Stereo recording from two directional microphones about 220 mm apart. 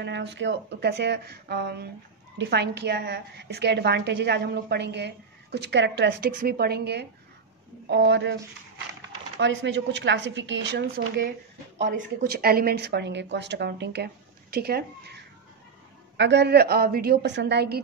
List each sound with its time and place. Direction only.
0.0 s a woman's voice: 50° right (ahead or behind)
9.4 s a woman's voice: 55° right (ahead or behind)